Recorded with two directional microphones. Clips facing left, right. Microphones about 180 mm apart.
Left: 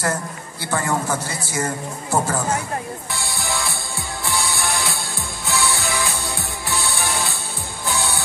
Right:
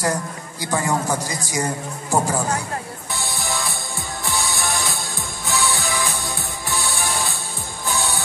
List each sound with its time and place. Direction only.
0.0 s a woman's voice: 15° right (ahead or behind)
3.2 s music: 20° right (ahead or behind)